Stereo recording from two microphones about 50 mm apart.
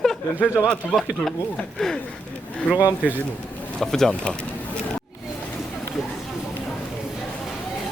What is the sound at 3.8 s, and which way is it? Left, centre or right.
Speech, centre.